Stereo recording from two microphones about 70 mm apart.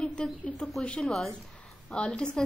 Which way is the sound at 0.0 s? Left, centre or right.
Centre.